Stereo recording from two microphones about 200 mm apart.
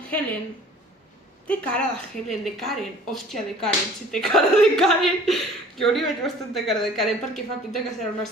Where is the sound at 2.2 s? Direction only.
Centre (ahead or behind).